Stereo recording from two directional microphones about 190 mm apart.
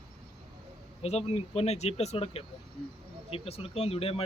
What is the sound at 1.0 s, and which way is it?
Speech, 30° left (ahead or behind).